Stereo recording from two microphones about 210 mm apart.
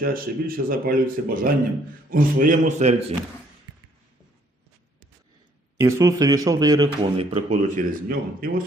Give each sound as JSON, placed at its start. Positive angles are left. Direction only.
{"t": 0.0, "sound": "a man's voice", "side_deg": -45}
{"t": 5.8, "sound": "speech", "side_deg": -15}
{"t": 8.0, "sound": "speech", "side_deg": -45}